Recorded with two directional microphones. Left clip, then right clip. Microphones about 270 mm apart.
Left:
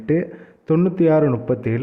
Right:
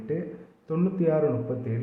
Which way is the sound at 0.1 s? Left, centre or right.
Left.